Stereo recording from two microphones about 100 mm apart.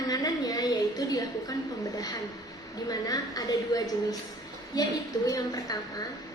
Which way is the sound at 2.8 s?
40° left (ahead or behind).